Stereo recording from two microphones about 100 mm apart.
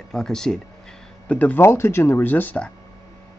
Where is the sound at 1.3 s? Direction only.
15° left (ahead or behind).